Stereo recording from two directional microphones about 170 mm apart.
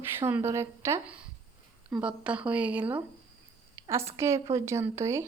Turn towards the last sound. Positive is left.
turn(degrees=-15)  # may be behind; listen again after turning